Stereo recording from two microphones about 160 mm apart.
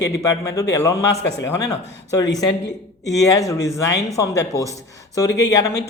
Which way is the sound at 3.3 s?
20° left (ahead or behind).